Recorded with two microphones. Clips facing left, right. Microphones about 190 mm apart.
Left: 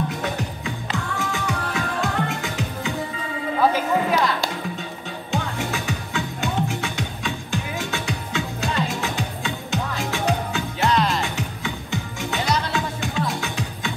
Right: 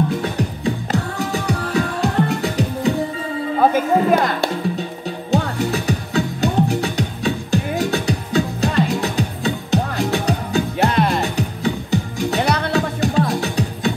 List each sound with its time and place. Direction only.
0.2 s music: 35° right (ahead or behind)
3.5 s music: 45° right (ahead or behind)
5.3 s music: 35° right (ahead or behind)
10.9 s music: 55° right (ahead or behind)
11.1 s music: 35° right (ahead or behind)
12.4 s music: 60° right (ahead or behind)
12.7 s music: 35° right (ahead or behind)